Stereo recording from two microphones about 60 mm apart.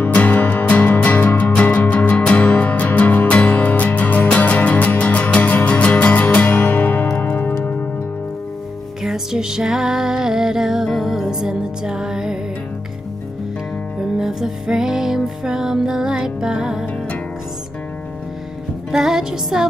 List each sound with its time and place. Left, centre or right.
0.0 s music: left
9.0 s music: centre
13.9 s music: centre
18.9 s music: centre